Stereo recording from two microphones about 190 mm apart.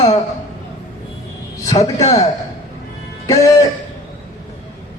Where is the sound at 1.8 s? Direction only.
35° left (ahead or behind).